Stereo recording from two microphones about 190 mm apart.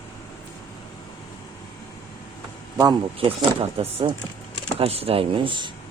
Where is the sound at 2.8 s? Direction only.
25° right (ahead or behind).